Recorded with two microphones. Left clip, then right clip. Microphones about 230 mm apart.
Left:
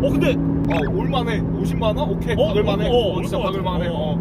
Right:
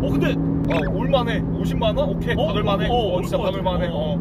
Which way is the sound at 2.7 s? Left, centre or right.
Centre.